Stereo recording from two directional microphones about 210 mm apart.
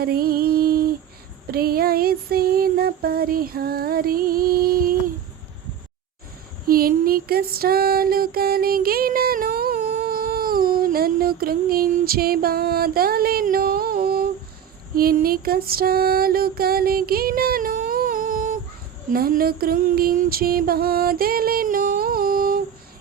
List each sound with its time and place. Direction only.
0.0 s music: 45° right (ahead or behind)
1.5 s a sound: 45° right (ahead or behind)
6.7 s music: 45° right (ahead or behind)